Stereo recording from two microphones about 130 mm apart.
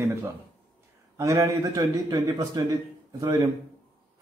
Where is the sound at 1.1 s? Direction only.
25° right (ahead or behind).